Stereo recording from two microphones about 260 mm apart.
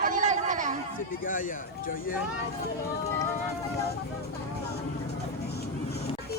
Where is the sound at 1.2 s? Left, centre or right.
Left.